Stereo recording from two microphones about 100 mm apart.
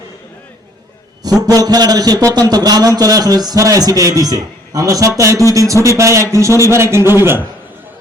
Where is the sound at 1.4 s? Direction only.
40° right (ahead or behind).